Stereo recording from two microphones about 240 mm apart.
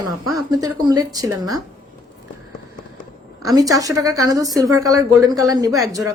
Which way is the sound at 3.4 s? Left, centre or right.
Centre.